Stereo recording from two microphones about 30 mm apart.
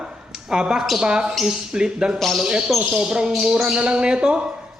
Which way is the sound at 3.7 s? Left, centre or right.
Right.